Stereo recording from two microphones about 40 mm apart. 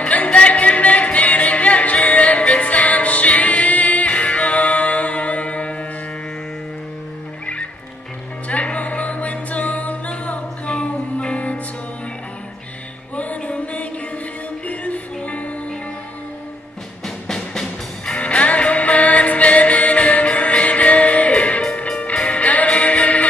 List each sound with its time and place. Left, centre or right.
0.0 s music: left
8.5 s music: left
10.7 s music: left
13.1 s music: left
17.0 s music: centre
18.1 s music: left